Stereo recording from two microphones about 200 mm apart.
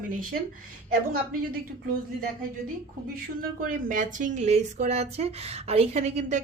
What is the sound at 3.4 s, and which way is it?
A woman's voice, 45° right (ahead or behind).